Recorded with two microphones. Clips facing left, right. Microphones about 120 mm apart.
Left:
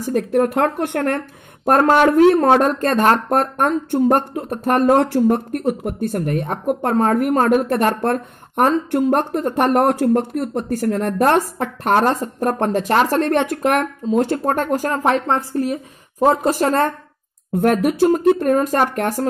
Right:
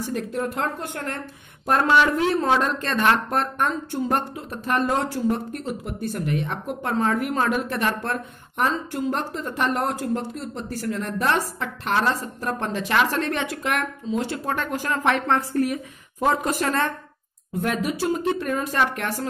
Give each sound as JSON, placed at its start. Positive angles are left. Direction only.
{"t": 0.0, "sound": "speech", "side_deg": 55}
{"t": 1.7, "sound": "speech", "side_deg": 45}
{"t": 17.6, "sound": "speech", "side_deg": 55}